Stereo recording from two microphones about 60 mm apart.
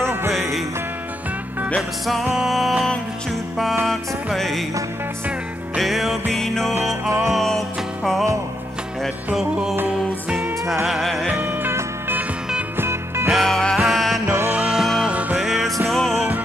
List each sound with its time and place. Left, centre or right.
0.0 s music: right
0.3 s music: centre
1.8 s music: centre
3.8 s music: centre
5.8 s music: centre
9.3 s music: centre
10.9 s music: centre
11.2 s music: right
12.7 s music: right
13.3 s music: centre
14.2 s music: right
14.7 s music: centre
15.0 s music: right
15.3 s music: centre